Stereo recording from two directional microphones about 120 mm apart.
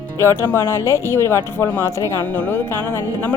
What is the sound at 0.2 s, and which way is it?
Speech, 20° left (ahead or behind).